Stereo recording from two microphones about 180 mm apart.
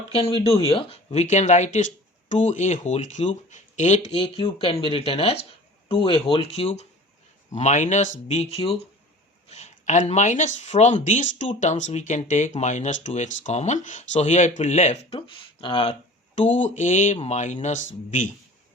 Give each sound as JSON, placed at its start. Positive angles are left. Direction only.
{"t": 0.1, "sound": "speech", "side_deg": 35}